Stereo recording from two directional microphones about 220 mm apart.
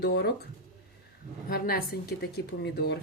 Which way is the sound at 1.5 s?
45° left (ahead or behind).